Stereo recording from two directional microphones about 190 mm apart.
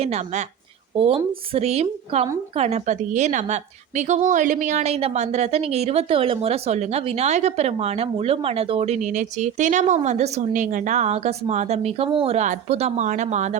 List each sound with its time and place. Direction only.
0.0 s a woman's voice: 35° right (ahead or behind)